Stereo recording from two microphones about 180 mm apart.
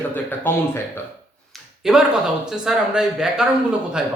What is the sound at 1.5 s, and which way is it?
Speech, centre (ahead or behind).